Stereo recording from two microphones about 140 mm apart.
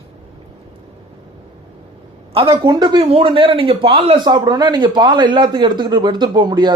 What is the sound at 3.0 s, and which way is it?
Speech, 45° right (ahead or behind).